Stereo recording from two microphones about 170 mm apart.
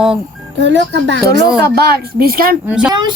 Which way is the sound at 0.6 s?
90° right.